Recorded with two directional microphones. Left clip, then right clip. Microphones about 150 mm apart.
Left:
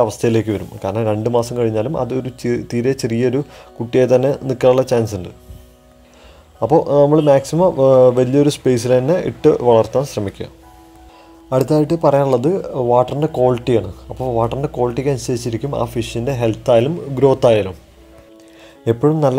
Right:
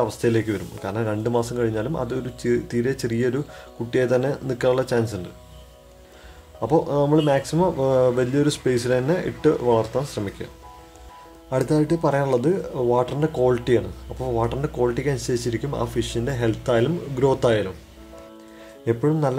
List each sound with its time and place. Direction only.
0.0 s speech: 35° left (ahead or behind)
6.6 s speech: 35° left (ahead or behind)
11.5 s speech: 35° left (ahead or behind)
18.9 s speech: 40° left (ahead or behind)